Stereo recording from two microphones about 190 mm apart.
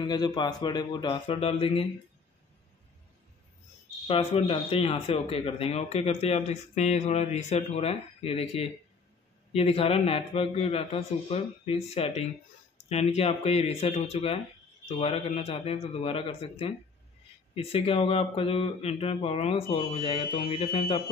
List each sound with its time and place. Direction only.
0.0 s a man's voice: 20° left (ahead or behind)
4.1 s speech: 30° left (ahead or behind)